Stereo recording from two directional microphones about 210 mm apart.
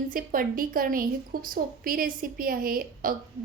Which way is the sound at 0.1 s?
45° right (ahead or behind).